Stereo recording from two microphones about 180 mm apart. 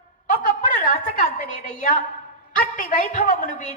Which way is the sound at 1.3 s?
45° left (ahead or behind).